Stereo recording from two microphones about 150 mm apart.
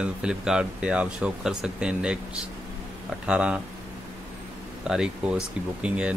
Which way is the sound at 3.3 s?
5° right (ahead or behind).